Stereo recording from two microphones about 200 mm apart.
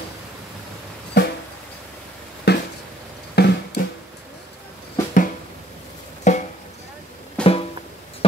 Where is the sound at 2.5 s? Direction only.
55° left (ahead or behind).